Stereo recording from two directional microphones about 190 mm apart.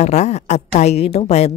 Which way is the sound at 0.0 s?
35° left (ahead or behind).